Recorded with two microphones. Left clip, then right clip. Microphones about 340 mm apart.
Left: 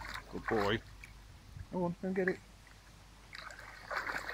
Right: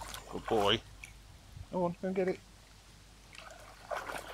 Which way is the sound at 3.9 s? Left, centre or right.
Centre.